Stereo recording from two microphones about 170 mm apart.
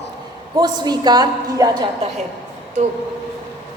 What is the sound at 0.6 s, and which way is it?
A woman's voice, 25° right (ahead or behind).